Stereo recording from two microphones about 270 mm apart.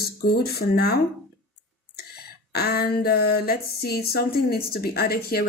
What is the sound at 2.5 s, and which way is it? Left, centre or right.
A woman's voice, left.